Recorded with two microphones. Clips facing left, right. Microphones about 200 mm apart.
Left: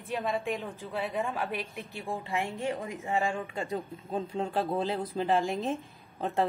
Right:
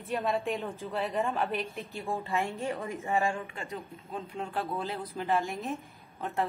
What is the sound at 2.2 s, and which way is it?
Speech, 15° left (ahead or behind).